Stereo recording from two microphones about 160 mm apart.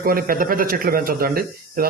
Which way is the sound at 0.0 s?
65° right (ahead or behind).